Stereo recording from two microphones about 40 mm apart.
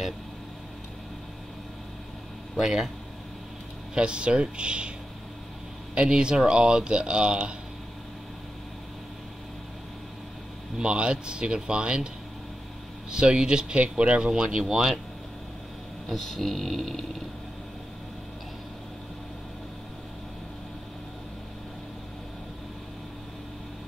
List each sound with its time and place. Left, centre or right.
2.6 s speech: centre
3.9 s speech: right
5.9 s speech: right
10.8 s speech: right
13.1 s speech: right
14.6 s speech: centre
16.1 s speech: centre